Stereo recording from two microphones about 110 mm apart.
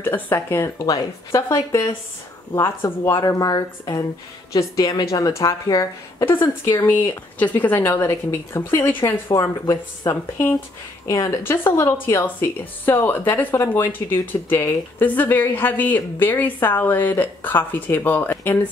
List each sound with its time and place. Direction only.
0.0 s a woman's voice: 20° left (ahead or behind)
0.7 s a woman's voice: 30° left (ahead or behind)
3.2 s a woman's voice: 35° left (ahead or behind); by 18.6 s 20° left (ahead or behind)